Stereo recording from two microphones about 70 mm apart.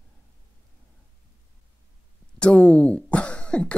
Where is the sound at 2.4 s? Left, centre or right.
Centre.